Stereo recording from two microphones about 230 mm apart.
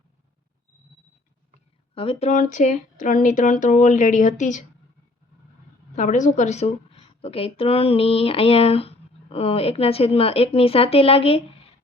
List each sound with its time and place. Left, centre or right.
2.0 s speech: left
6.0 s a woman's voice: left